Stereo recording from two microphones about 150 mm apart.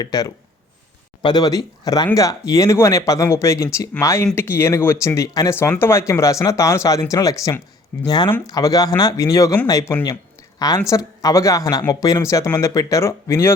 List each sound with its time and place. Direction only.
0.0 s speech: 25° left (ahead or behind)